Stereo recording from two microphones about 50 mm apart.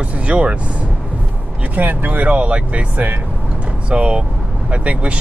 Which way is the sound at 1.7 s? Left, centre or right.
Right.